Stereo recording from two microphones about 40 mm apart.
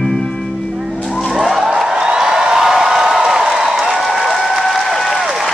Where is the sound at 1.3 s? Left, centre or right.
Centre.